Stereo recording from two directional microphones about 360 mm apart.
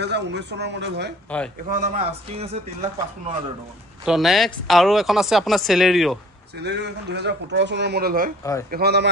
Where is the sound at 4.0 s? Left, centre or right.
Centre.